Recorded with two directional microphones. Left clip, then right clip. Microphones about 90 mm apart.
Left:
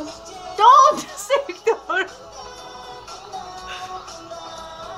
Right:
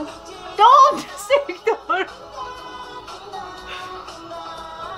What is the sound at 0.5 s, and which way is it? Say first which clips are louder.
A woman's voice: even; 5° right (ahead or behind).